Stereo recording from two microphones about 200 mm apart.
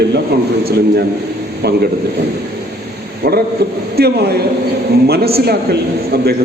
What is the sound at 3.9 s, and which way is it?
A man's voice, 50° right (ahead or behind).